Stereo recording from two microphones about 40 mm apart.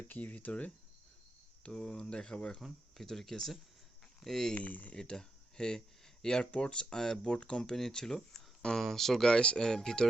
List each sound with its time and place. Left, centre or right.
0.2 s speech: left
1.6 s speech: left
2.6 s speech: centre
4.5 s speech: left
4.9 s speech: centre
6.4 s speech: left
7.8 s speech: centre
9.3 s speech: left